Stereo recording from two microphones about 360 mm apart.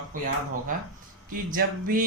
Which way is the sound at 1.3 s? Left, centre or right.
Right.